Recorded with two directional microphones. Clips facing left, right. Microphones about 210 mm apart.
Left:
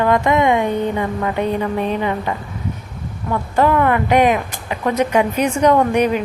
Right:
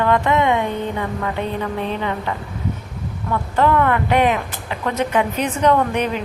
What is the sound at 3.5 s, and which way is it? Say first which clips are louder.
A woman's voice: left 2 dB; 10° left (ahead or behind).